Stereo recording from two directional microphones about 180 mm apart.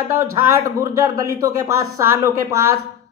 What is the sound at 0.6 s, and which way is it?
Speech, 20° right (ahead or behind).